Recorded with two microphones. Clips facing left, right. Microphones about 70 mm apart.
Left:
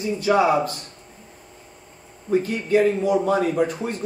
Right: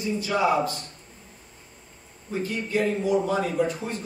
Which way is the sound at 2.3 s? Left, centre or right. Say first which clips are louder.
Left 8 dB; left.